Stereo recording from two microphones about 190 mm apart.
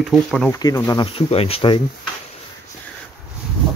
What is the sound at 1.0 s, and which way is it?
Speech, 30° left (ahead or behind).